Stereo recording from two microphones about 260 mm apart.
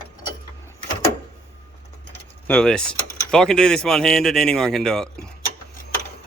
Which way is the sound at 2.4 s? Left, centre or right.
Centre.